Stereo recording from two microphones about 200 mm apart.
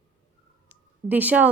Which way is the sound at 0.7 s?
10° right (ahead or behind).